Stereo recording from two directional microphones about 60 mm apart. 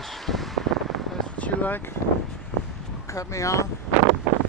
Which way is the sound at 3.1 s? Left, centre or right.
Left.